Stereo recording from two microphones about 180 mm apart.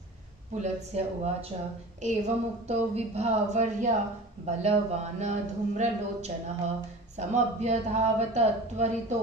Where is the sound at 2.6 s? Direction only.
35° right (ahead or behind).